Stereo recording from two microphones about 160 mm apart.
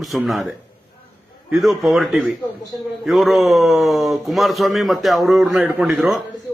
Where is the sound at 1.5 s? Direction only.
Centre (ahead or behind).